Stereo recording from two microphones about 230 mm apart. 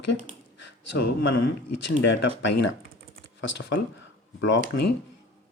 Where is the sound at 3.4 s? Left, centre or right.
Left.